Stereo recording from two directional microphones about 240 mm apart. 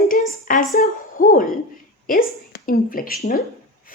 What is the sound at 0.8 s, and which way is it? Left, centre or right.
A woman's voice, left.